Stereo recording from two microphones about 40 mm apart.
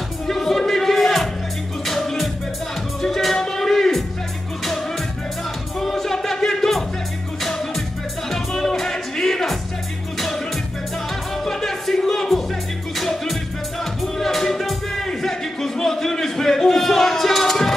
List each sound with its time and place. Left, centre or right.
0.3 s music: centre
5.8 s music: centre
11.4 s music: centre
15.0 s a sound: centre